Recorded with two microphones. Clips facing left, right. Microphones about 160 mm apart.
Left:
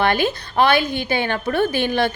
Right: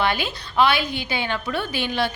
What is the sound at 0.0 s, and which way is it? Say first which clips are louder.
A woman's voice: left 5 dB; 50° left (ahead or behind).